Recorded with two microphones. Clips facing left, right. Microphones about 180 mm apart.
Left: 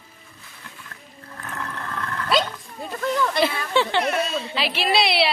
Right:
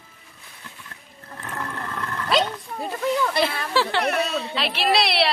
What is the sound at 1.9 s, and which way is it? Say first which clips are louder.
Dog: left 2 dB; 20° right (ahead or behind).